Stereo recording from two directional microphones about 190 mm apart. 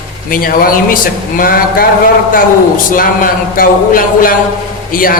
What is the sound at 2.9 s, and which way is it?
Speech, 50° left (ahead or behind).